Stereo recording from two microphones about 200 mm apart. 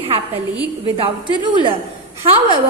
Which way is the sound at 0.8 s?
25° right (ahead or behind).